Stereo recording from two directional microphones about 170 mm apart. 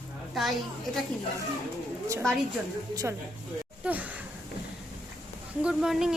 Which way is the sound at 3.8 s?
5° right (ahead or behind).